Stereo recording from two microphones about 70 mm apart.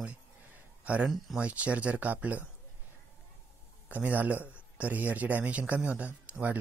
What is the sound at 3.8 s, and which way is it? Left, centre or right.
A man's voice, right.